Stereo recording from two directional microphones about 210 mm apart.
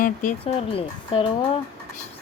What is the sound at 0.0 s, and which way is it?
Speech, 35° left (ahead or behind).